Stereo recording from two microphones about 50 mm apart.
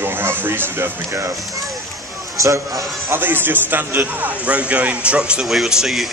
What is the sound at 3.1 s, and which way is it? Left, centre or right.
Speech, right.